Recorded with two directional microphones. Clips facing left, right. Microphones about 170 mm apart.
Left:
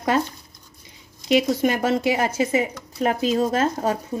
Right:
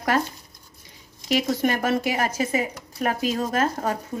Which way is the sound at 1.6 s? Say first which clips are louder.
Left 2 dB; 20° left (ahead or behind).